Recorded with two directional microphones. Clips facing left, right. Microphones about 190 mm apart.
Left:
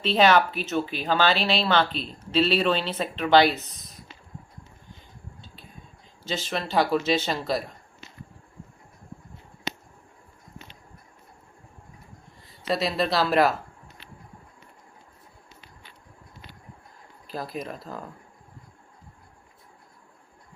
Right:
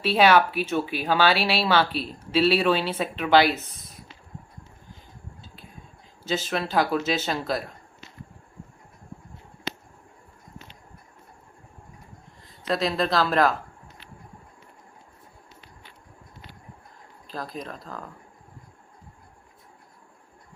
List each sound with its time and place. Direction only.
0.0 s speech: 10° right (ahead or behind)
6.2 s speech: 5° right (ahead or behind)
9.7 s a sound: 15° left (ahead or behind)
12.6 s speech: 5° left (ahead or behind)
17.2 s speech: 10° left (ahead or behind)